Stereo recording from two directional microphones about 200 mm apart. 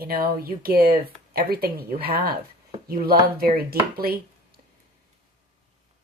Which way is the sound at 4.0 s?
50° right (ahead or behind).